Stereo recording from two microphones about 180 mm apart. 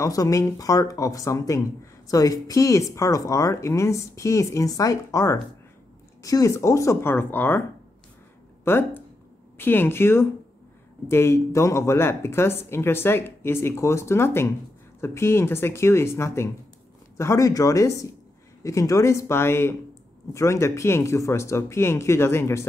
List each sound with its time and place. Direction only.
0.0 s speech: 20° left (ahead or behind)
8.6 s speech: 10° left (ahead or behind)